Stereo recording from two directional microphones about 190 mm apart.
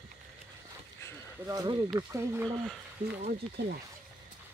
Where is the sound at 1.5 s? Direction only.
20° right (ahead or behind).